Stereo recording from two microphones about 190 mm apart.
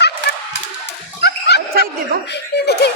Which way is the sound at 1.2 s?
60° left (ahead or behind).